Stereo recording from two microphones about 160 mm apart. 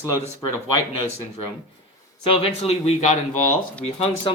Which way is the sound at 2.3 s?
35° left (ahead or behind).